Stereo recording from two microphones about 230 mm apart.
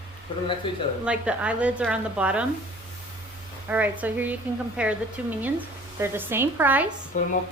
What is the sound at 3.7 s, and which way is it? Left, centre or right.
A woman's voice, centre.